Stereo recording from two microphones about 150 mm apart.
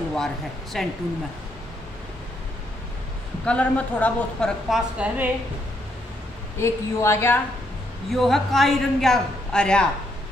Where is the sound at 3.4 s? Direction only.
10° left (ahead or behind).